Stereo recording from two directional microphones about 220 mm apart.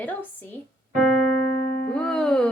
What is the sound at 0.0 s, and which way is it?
Speech, 10° left (ahead or behind).